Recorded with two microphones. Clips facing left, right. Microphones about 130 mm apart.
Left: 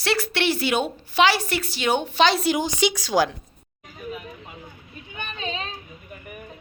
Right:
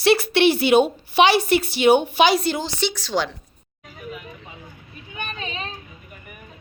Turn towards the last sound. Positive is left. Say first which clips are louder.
# even
turn(degrees=-10)  # may be behind; listen again after turning